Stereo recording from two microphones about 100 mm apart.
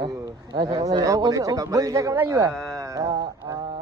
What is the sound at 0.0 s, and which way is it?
A man's voice, 45° right (ahead or behind).